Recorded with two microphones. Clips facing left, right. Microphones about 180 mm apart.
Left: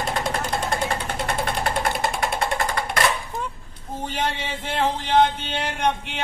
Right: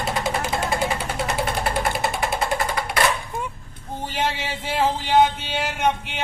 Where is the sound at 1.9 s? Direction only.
5° right (ahead or behind).